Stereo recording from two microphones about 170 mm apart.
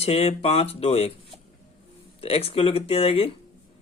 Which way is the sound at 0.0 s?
35° left (ahead or behind).